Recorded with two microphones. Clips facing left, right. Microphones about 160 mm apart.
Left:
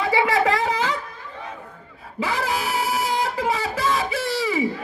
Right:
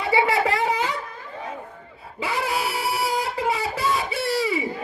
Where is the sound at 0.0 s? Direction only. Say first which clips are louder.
Left 1 dB; 90° left.